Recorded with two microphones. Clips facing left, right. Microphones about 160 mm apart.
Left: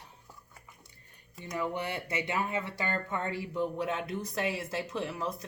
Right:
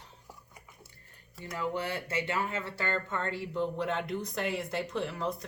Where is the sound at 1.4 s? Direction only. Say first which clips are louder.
Even; 20° left (ahead or behind); by 5.2 s 5° left (ahead or behind).